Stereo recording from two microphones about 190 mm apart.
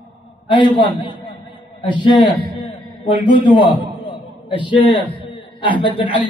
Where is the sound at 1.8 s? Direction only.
25° left (ahead or behind).